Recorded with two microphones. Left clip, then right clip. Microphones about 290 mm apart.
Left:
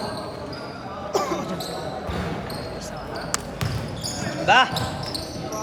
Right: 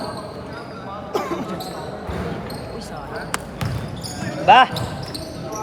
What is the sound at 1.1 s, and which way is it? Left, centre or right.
Basketball bounce, left.